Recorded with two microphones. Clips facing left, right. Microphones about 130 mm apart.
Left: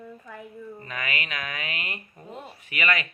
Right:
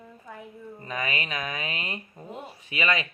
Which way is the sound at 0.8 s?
30° right (ahead or behind).